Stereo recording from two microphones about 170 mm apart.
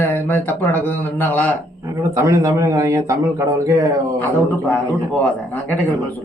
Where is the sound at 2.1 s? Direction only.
20° right (ahead or behind).